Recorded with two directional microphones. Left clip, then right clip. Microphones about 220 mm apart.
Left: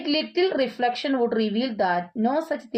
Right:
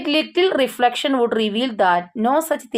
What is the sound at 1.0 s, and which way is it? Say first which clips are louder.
A woman's voice: right 5 dB; 15° right (ahead or behind).